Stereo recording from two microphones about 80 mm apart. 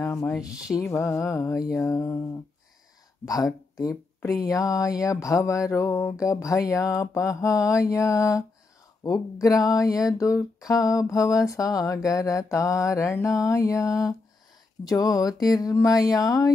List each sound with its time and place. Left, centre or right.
0.0 s speech: left
0.4 s speech: centre
0.8 s music: left
3.3 s a sound: left